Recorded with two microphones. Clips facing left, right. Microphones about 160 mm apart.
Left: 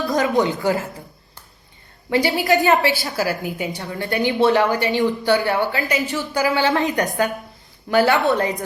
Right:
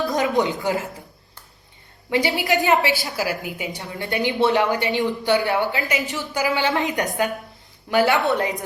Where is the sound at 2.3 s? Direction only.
40° left (ahead or behind).